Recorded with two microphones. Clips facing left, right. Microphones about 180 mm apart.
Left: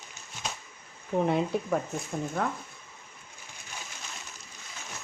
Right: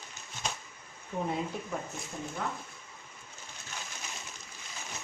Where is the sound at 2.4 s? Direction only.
60° left (ahead or behind).